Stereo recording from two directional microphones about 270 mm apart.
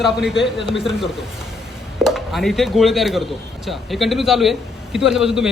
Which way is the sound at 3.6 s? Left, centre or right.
Centre.